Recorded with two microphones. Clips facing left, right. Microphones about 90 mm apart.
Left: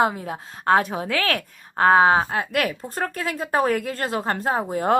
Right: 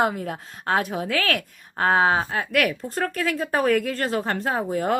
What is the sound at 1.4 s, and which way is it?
A woman's voice, 40° left (ahead or behind).